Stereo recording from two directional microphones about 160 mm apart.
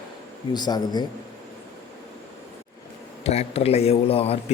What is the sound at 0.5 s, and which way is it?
Speech, 25° left (ahead or behind).